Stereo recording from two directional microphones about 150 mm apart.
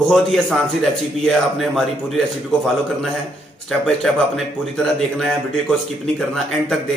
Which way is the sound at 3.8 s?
Centre (ahead or behind).